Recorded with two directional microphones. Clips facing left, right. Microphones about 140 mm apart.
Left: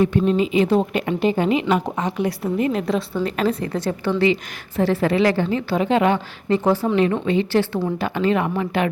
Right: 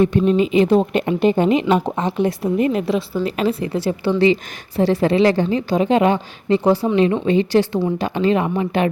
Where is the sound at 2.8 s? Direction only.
5° right (ahead or behind).